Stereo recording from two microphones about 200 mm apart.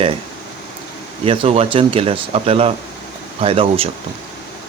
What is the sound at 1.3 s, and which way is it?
Speech, 30° right (ahead or behind).